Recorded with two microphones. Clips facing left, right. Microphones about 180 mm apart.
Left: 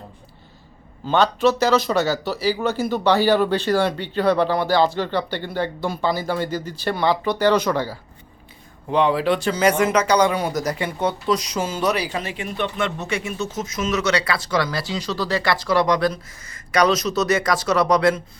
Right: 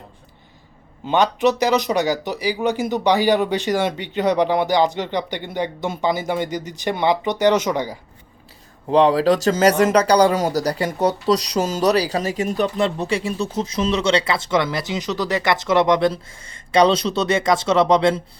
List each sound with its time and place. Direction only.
1.0 s speech: 15° right (ahead or behind)
8.9 s speech: 35° right (ahead or behind)